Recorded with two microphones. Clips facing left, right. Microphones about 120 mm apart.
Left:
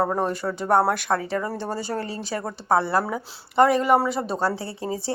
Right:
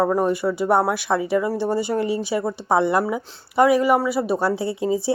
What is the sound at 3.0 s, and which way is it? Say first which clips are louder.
Speech: right 4 dB; 5° right (ahead or behind).